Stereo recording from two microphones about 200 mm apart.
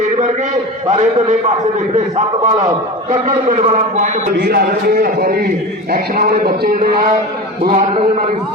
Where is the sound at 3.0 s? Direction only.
40° right (ahead or behind).